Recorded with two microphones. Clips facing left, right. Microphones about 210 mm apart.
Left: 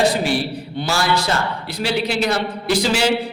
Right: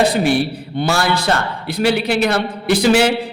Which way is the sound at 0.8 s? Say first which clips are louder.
Right 3 dB; 55° right (ahead or behind).